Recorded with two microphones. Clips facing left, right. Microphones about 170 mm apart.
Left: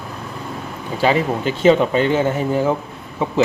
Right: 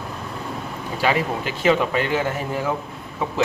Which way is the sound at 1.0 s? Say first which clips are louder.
Left 5 dB; 30° left (ahead or behind).